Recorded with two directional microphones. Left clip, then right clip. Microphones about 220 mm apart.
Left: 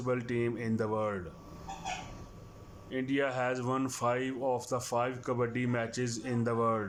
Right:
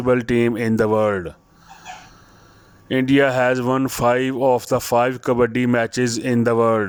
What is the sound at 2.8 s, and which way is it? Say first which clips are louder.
Speech: right 16 dB; 45° right (ahead or behind).